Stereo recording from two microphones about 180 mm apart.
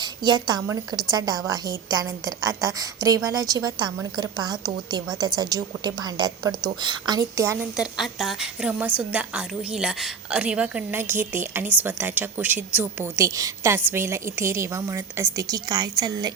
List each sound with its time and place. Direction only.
0.0 s a woman's voice: 25° right (ahead or behind)
7.8 s a woman's voice: centre (ahead or behind); by 16.3 s 20° right (ahead or behind)